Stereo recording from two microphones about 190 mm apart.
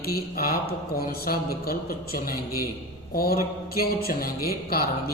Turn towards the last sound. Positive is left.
turn(degrees=50)  # may be behind; listen again after turning